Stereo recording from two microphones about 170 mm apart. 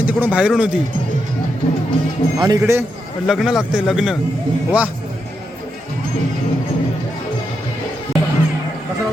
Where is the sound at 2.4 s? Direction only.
20° right (ahead or behind).